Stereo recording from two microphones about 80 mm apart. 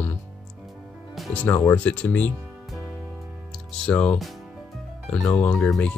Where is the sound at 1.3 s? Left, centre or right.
Left.